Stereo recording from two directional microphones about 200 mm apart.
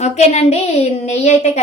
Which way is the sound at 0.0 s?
35° left (ahead or behind).